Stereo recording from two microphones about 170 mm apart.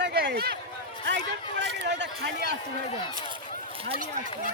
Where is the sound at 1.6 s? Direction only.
90° right.